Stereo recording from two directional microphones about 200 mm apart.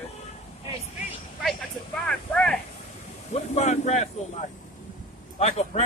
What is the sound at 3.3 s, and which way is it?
Speech, 35° left (ahead or behind).